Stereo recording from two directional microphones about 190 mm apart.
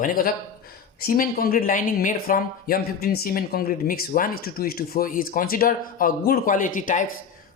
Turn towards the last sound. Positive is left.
turn(degrees=45)  # may be behind; listen again after turning